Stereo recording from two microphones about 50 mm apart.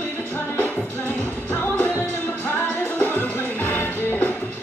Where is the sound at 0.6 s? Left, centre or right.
Left.